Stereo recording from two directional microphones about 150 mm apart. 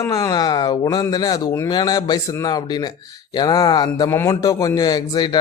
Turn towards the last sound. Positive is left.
turn(degrees=25)  # may be behind; listen again after turning